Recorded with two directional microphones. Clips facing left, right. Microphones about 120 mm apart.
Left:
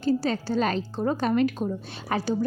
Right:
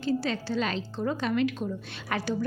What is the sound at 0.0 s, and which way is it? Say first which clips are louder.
A woman's voice: left 4 dB; 40° left (ahead or behind).